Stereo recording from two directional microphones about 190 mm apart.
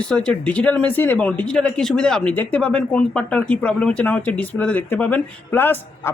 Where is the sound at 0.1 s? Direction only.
5° left (ahead or behind).